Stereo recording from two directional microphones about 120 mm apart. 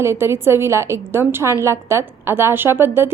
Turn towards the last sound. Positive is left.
turn(degrees=-20)  # may be behind; listen again after turning